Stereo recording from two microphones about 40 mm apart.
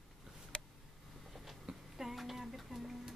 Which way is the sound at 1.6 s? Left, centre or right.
Centre.